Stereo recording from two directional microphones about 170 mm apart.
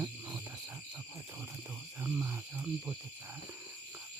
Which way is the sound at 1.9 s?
15° right (ahead or behind).